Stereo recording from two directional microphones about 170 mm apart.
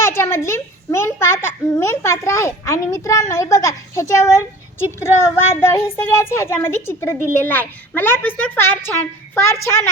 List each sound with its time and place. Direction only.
0.0 s a child's voice: 15° left (ahead or behind)